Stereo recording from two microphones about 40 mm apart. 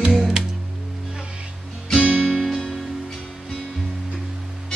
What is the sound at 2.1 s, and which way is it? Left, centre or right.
Music, centre.